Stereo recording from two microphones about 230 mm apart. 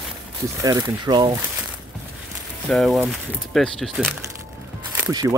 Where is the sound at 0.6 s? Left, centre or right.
Centre.